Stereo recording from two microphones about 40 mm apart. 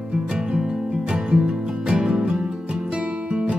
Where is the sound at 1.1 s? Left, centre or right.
Right.